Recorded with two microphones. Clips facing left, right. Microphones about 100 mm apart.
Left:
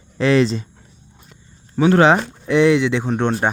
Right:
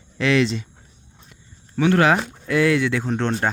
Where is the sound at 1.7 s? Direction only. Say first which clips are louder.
Left 4 dB; 25° left (ahead or behind).